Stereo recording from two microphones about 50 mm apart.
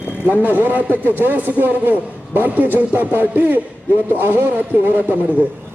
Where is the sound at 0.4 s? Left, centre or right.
Right.